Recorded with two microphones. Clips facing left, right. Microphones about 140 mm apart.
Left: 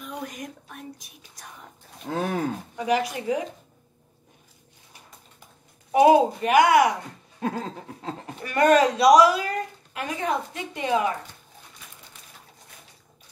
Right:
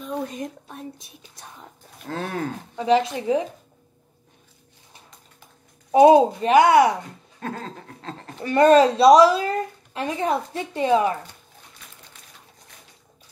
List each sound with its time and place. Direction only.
0.0 s a woman's voice: 25° right (ahead or behind)
2.0 s a sound: 10° left (ahead or behind)
2.7 s a woman's voice: 25° right (ahead or behind)
5.9 s a woman's voice: 25° right (ahead or behind)
7.3 s a sound: 15° left (ahead or behind)
8.4 s a woman's voice: 25° right (ahead or behind)